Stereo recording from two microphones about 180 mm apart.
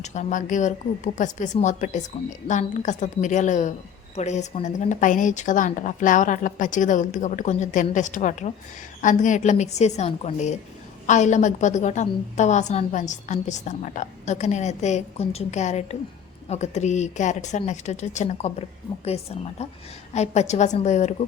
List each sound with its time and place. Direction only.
0.0 s a woman's voice: 40° left (ahead or behind)